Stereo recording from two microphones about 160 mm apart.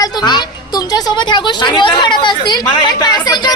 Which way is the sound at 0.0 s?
25° left (ahead or behind).